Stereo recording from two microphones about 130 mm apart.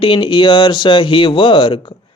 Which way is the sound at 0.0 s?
40° left (ahead or behind).